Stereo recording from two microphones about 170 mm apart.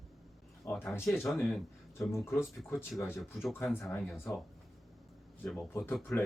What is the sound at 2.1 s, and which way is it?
Speech, 15° left (ahead or behind).